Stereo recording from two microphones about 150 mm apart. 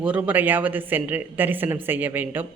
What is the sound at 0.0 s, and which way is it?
A man's voice, 10° right (ahead or behind).